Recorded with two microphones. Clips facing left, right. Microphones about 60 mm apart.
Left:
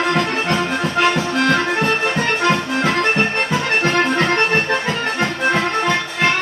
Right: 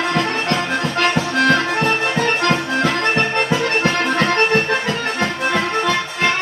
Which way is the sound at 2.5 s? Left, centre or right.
Centre.